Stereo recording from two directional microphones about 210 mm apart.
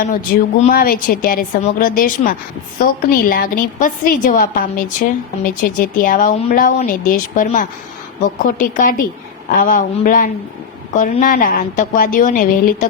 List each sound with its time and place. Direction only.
0.7 s a woman's voice: 45° left (ahead or behind)